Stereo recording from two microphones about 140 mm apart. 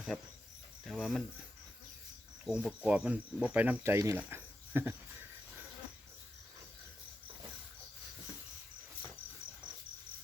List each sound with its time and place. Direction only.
0.1 s speech: centre (ahead or behind)
2.5 s speech: 5° right (ahead or behind)